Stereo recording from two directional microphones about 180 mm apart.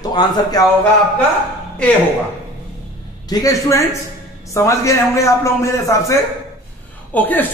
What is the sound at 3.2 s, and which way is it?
A man's voice, 20° left (ahead or behind).